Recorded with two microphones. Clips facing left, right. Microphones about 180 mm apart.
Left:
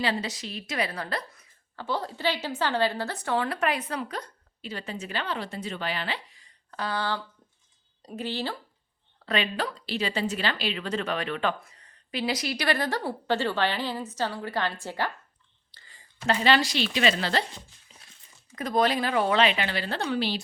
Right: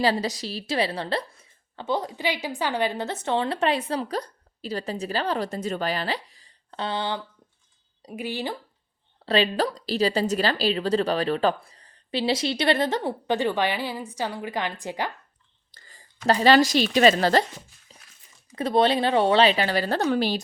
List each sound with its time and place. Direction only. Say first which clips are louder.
0.0 s a woman's voice: right 5 dB; 35° right (ahead or behind); by 8.5 s 15° right (ahead or behind)
9.2 s a woman's voice: right 6 dB; 30° right (ahead or behind); by 15.1 s 15° right (ahead or behind)
15.7 s speech: right 3 dB; 45° right (ahead or behind)
18.5 s a woman's voice: right 4 dB; 30° right (ahead or behind); by 20.4 s 45° right (ahead or behind)